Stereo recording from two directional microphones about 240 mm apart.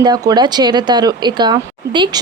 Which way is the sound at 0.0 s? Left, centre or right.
Centre.